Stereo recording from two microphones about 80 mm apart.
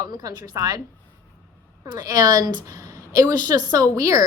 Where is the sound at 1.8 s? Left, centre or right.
Right.